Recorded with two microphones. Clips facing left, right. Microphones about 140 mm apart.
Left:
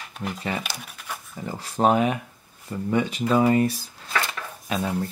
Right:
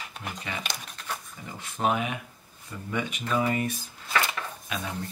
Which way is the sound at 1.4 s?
35° left (ahead or behind).